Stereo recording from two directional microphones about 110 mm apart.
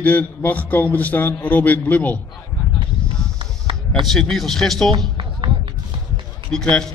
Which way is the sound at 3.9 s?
5° left (ahead or behind).